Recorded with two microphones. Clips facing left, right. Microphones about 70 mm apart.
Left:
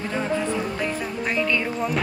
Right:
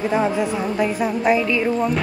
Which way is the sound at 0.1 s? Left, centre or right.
Centre.